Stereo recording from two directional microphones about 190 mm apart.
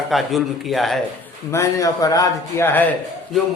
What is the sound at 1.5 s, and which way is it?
A man's voice, 15° left (ahead or behind).